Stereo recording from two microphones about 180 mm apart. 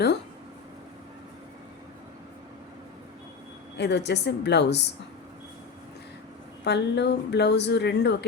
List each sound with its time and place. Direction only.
3.8 s a woman's voice: 70° left (ahead or behind)
6.7 s a woman's voice: 70° left (ahead or behind)